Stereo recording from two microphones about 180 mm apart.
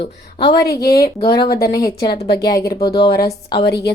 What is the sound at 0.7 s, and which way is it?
A woman's voice, 60° left (ahead or behind).